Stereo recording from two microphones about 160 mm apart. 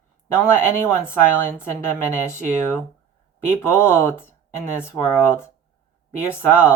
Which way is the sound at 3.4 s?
15° left (ahead or behind).